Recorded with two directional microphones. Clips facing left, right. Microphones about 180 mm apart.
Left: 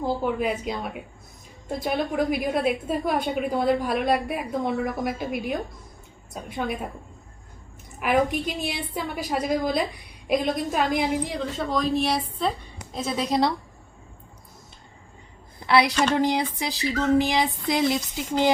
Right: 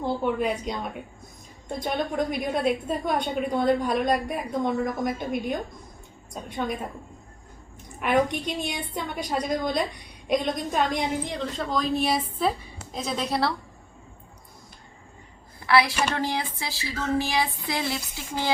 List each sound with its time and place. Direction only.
0.0 s a woman's voice: centre (ahead or behind)
7.9 s a woman's voice: 5° left (ahead or behind)
13.1 s a woman's voice: 15° left (ahead or behind)
15.6 s speech: 20° left (ahead or behind)